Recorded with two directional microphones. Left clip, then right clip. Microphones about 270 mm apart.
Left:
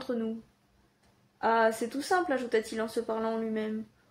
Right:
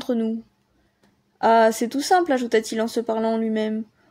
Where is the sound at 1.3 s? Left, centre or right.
Right.